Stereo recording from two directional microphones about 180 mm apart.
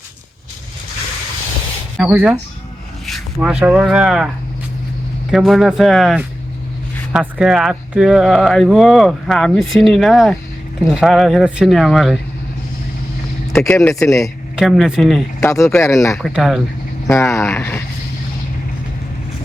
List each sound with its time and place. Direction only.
2.0 s speech: 5° right (ahead or behind)
5.3 s speech: centre (ahead or behind)
13.5 s speech: 10° left (ahead or behind)
14.5 s speech: 5° right (ahead or behind)
15.4 s speech: 15° left (ahead or behind)
16.2 s speech: centre (ahead or behind)
17.1 s speech: 15° left (ahead or behind)